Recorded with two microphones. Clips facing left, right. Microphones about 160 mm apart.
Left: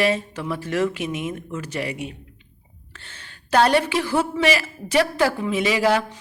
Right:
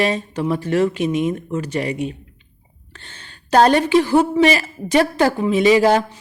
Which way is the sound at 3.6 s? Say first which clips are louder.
Right 5 dB; 30° right (ahead or behind).